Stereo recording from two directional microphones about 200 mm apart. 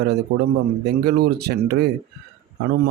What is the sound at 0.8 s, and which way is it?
Speech, 50° right (ahead or behind).